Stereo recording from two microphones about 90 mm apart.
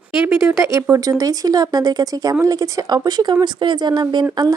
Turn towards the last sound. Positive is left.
turn(degrees=-50)  # may be behind; listen again after turning